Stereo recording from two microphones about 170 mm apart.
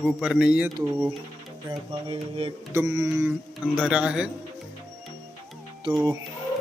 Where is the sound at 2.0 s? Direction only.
30° right (ahead or behind).